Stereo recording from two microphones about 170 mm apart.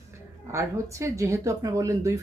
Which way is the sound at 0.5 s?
15° right (ahead or behind).